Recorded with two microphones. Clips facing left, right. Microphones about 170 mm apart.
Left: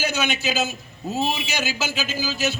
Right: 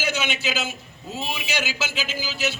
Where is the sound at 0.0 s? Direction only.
45° left (ahead or behind).